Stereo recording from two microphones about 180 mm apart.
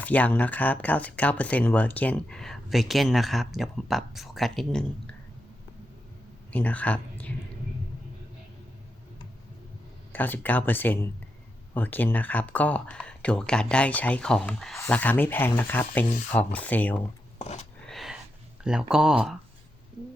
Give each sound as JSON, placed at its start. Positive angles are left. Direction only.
{"t": 0.0, "sound": "speech", "side_deg": 10}
{"t": 6.5, "sound": "speech", "side_deg": 10}
{"t": 10.1, "sound": "speech", "side_deg": 10}
{"t": 17.3, "sound": "a sound", "side_deg": 35}
{"t": 17.8, "sound": "a sound", "side_deg": 0}
{"t": 18.6, "sound": "speech", "side_deg": -5}